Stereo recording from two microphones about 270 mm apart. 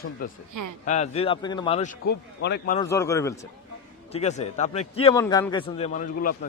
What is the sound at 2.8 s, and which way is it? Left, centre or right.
Speech, centre.